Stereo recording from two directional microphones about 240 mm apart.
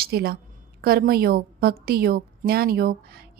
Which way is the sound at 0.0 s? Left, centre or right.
Right.